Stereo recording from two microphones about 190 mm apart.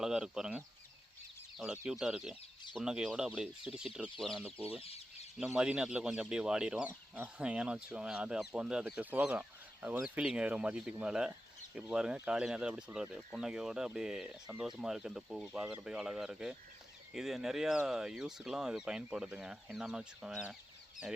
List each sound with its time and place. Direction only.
0.0 s speech: 5° right (ahead or behind)
4.8 s chicken: 30° left (ahead or behind)
5.4 s speech: 5° right (ahead or behind)